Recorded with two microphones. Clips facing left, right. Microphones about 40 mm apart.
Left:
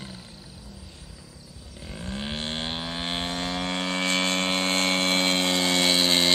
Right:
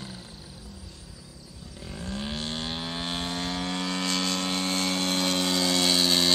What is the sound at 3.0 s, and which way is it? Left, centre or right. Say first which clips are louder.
Vehicle: left 2 dB; left.